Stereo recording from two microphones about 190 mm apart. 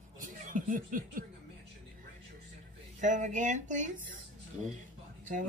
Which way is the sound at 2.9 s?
40° right (ahead or behind).